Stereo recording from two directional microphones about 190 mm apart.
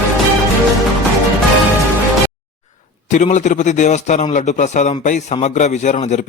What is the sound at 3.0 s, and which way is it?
A man's voice, 40° left (ahead or behind).